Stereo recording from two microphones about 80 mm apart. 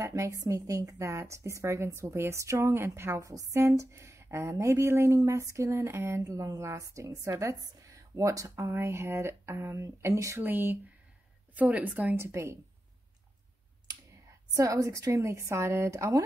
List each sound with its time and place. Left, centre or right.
0.0 s speech: right
10.4 s a woman's voice: right
12.3 s speech: right
14.5 s speech: right